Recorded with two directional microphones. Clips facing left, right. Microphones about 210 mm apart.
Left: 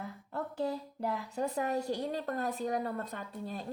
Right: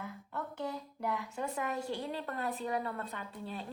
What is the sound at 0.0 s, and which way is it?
Speech, 35° left (ahead or behind).